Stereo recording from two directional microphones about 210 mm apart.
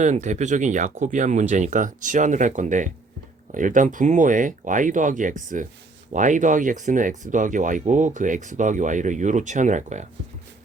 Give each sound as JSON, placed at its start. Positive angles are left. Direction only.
{"t": 0.0, "sound": "speech", "side_deg": -35}